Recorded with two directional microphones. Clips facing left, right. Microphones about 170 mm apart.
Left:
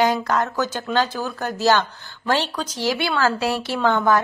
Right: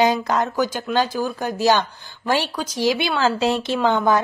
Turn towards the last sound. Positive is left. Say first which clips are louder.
# right 1 dB
turn(degrees=-15)  # may be behind; listen again after turning